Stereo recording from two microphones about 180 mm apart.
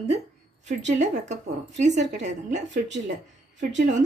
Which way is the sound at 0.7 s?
40° right (ahead or behind).